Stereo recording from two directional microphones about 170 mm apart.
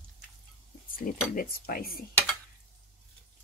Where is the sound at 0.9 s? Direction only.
55° left (ahead or behind).